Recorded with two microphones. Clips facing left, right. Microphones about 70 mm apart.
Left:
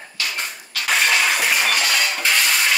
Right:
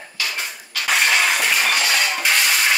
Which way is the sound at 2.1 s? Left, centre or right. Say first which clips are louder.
Right 1 dB; centre.